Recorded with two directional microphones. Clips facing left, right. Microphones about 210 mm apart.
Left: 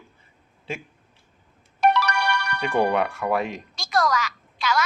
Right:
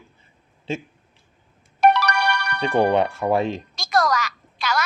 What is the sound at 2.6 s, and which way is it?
Speech, 25° right (ahead or behind).